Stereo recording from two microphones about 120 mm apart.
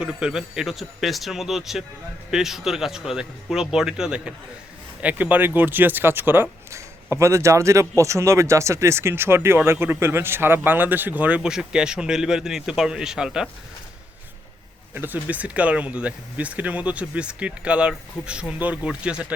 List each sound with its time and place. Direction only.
0.0 s speech: 5° right (ahead or behind)
14.9 s speech: 15° right (ahead or behind)